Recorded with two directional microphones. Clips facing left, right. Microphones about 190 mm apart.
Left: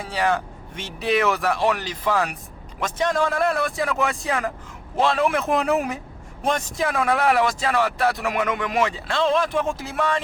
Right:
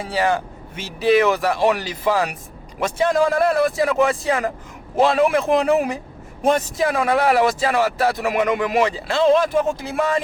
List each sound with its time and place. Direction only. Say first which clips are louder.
0.1 s speech: right 2 dB; centre (ahead or behind)